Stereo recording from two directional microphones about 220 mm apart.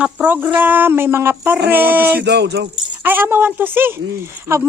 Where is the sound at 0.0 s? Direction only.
10° right (ahead or behind).